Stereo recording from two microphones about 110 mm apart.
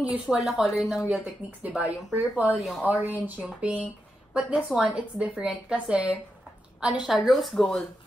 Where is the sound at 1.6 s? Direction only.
10° right (ahead or behind).